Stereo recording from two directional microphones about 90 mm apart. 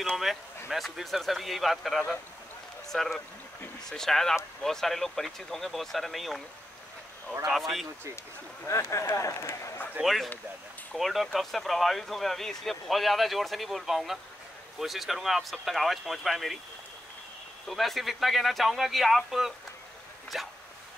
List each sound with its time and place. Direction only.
0.1 s speech: centre (ahead or behind)
7.4 s speech: centre (ahead or behind)
8.9 s speech: 30° left (ahead or behind)
10.0 s speech: centre (ahead or behind)
17.6 s speech: centre (ahead or behind)